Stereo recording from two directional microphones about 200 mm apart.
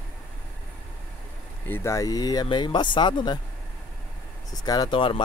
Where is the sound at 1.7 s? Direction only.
15° left (ahead or behind).